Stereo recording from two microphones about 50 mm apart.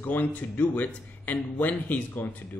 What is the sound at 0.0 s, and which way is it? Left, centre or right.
A man's voice, left.